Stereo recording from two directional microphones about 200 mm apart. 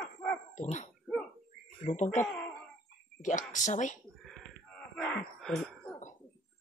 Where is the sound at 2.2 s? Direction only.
5° left (ahead or behind).